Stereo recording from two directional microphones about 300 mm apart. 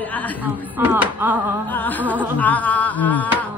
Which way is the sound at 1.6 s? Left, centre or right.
Centre.